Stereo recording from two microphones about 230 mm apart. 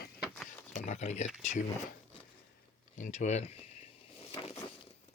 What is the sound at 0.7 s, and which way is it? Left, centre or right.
Speech, left.